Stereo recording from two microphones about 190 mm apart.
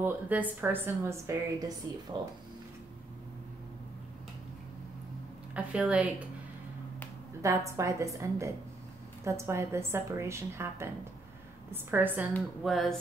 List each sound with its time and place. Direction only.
0.0 s a woman's voice: 10° right (ahead or behind)
5.5 s a woman's voice: 5° right (ahead or behind)
7.4 s a woman's voice: 15° right (ahead or behind)
12.6 s speech: centre (ahead or behind)